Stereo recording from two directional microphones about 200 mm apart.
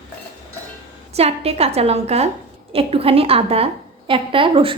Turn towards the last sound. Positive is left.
turn(degrees=-25)  # may be behind; listen again after turning